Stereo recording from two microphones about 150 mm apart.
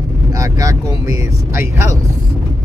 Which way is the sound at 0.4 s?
20° right (ahead or behind).